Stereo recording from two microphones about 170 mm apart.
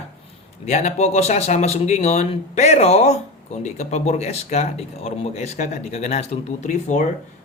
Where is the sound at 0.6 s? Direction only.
40° left (ahead or behind).